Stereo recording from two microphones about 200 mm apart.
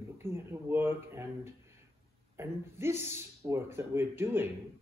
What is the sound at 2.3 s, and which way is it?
Speech, 10° right (ahead or behind).